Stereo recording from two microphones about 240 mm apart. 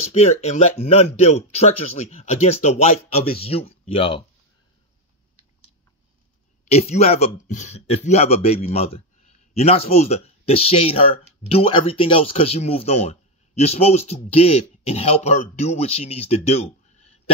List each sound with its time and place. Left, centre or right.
0.1 s speech: left
6.6 s speech: left